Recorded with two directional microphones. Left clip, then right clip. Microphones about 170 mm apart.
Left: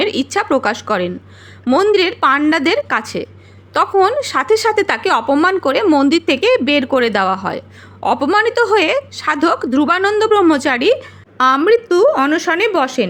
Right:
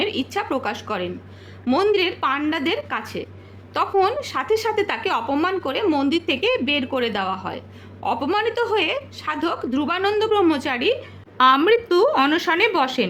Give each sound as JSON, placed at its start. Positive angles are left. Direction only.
{"t": 0.0, "sound": "a woman's voice", "side_deg": 30}
{"t": 11.3, "sound": "speech", "side_deg": 20}